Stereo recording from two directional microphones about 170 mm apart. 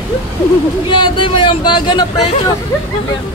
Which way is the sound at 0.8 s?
30° left (ahead or behind).